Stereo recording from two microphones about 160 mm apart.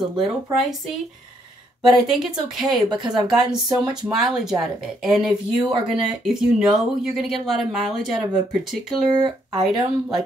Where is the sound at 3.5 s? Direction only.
5° right (ahead or behind).